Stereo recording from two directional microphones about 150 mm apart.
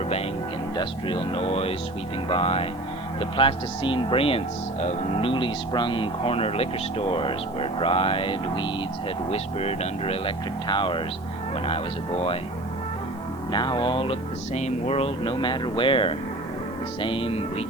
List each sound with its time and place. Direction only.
0.8 s speech: 35° left (ahead or behind)
13.5 s speech: 30° left (ahead or behind)